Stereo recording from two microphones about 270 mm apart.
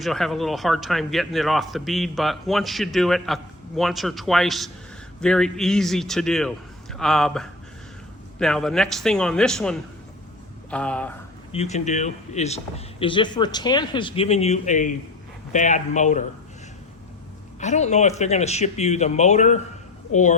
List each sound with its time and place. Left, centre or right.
0.0 s a man's voice: centre
11.5 s speech: left
17.6 s speech: left